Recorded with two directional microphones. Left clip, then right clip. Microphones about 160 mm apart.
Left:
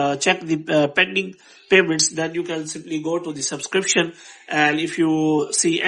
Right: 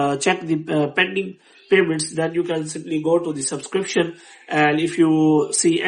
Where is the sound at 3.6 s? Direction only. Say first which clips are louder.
Left 2 dB; 35° left (ahead or behind).